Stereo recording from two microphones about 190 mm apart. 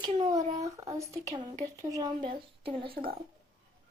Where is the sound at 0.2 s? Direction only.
20° right (ahead or behind).